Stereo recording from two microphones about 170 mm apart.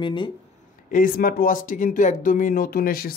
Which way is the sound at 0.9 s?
55° left (ahead or behind).